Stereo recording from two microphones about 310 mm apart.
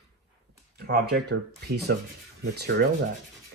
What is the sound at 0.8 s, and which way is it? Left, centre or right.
Speech, right.